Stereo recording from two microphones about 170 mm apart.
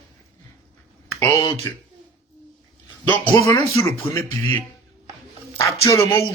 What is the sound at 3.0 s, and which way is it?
Speech, 10° left (ahead or behind).